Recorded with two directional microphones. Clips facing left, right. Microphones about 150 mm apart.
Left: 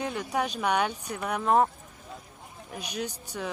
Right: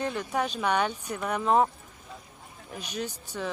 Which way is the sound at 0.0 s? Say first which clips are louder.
Even; 10° left (ahead or behind).